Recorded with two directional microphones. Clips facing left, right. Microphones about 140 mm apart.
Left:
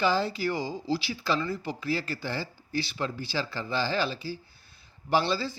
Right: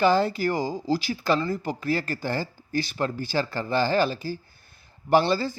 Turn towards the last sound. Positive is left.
turn(degrees=-50)  # may be behind; listen again after turning